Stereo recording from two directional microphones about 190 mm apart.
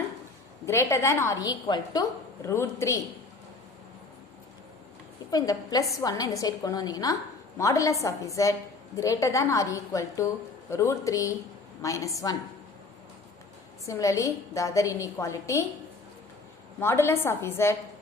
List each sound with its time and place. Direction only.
0.6 s a woman's voice: 15° left (ahead or behind)
5.3 s a woman's voice: 20° left (ahead or behind)
13.8 s a woman's voice: 15° left (ahead or behind)
16.8 s a woman's voice: 15° left (ahead or behind)